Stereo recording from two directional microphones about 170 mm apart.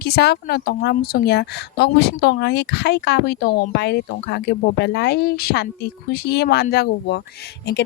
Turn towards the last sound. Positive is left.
turn(degrees=70)  # may be behind; listen again after turning